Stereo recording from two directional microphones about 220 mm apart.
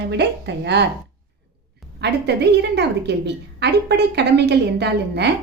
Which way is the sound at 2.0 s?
50° right (ahead or behind).